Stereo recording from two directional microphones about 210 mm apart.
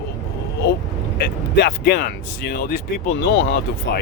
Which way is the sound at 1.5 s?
50° left (ahead or behind).